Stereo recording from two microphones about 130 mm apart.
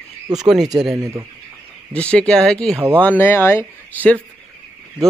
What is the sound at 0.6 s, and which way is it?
Speech, 30° right (ahead or behind).